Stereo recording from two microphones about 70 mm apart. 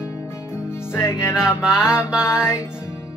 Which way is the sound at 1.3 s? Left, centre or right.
Centre.